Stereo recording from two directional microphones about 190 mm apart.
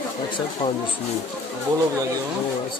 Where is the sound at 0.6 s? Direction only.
25° left (ahead or behind).